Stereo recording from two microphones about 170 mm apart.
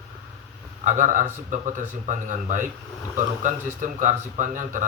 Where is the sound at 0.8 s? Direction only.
45° right (ahead or behind).